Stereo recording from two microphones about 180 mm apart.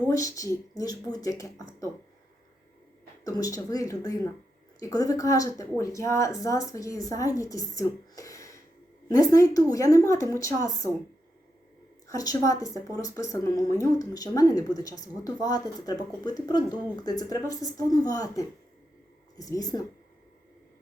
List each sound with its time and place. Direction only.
0.1 s speech: 20° left (ahead or behind)
3.2 s speech: 20° left (ahead or behind)
12.0 s speech: 20° left (ahead or behind)